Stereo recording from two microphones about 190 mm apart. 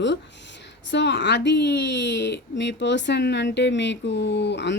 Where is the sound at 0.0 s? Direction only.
65° left (ahead or behind).